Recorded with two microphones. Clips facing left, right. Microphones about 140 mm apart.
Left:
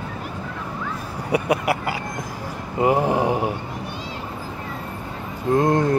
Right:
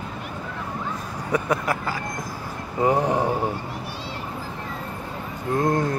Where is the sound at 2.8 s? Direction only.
5° left (ahead or behind).